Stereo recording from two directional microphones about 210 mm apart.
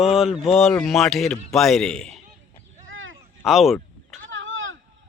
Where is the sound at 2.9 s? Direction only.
70° right (ahead or behind).